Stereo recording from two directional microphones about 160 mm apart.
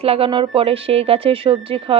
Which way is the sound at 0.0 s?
35° right (ahead or behind).